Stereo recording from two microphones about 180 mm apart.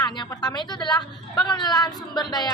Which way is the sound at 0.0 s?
20° left (ahead or behind).